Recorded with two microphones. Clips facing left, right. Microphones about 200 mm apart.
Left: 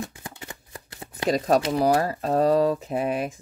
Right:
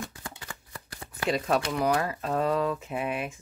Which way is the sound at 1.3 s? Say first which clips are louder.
Left 6 dB; 40° left (ahead or behind).